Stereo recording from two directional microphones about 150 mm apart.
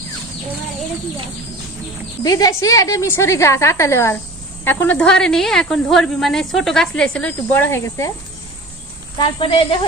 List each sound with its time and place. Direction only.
2.2 s a woman's voice: 25° left (ahead or behind)
9.1 s a woman's voice: 35° left (ahead or behind)